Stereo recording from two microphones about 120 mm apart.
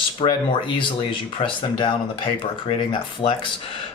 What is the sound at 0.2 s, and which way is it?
Speech, 50° left (ahead or behind).